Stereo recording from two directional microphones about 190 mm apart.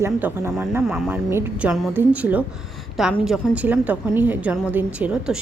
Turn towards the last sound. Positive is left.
turn(degrees=-5)  # may be behind; listen again after turning